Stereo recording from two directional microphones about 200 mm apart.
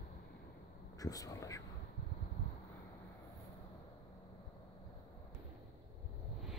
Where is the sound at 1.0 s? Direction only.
15° left (ahead or behind).